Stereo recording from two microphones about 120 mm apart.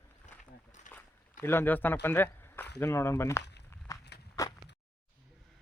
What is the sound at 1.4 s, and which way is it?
Speech, 20° left (ahead or behind).